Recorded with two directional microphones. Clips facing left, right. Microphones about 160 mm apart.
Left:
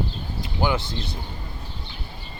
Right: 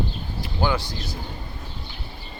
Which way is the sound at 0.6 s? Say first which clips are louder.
Even; 25° left (ahead or behind).